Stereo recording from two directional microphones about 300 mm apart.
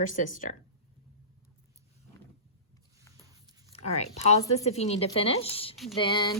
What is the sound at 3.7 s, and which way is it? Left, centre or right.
A woman's voice, left.